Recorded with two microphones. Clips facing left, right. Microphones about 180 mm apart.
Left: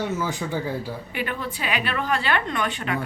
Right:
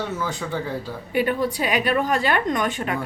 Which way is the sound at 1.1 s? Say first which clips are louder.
Right 10 dB; 40° right (ahead or behind).